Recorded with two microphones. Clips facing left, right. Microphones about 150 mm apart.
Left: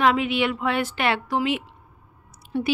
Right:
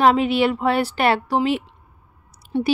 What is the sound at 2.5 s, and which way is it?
Speech, 20° right (ahead or behind).